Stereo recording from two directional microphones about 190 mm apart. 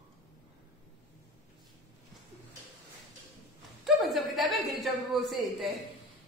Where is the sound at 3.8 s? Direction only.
Centre (ahead or behind).